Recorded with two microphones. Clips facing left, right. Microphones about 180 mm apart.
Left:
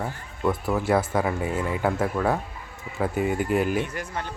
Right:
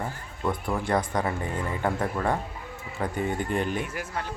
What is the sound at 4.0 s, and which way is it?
Speech, 5° right (ahead or behind).